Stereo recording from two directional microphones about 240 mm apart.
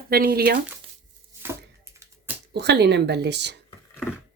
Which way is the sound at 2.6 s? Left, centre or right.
Right.